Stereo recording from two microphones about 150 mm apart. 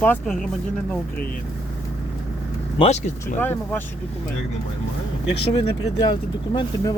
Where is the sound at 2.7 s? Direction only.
40° left (ahead or behind).